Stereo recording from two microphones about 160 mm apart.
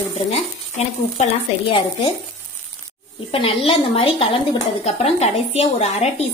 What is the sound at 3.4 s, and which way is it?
A woman's voice, 35° left (ahead or behind).